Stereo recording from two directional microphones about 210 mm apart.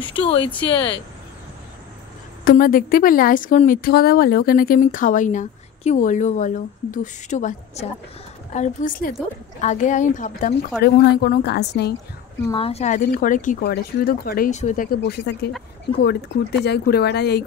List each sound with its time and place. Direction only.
0.1 s speech: 25° left (ahead or behind)
2.4 s speech: 45° left (ahead or behind)
10.8 s a woman's voice: 50° left (ahead or behind)
12.4 s speech: 25° left (ahead or behind); by 15.5 s 50° left (ahead or behind)
16.6 s a woman's voice: 50° left (ahead or behind)